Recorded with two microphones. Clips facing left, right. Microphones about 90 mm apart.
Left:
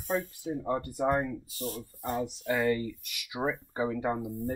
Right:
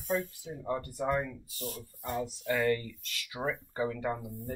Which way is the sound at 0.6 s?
30° left (ahead or behind).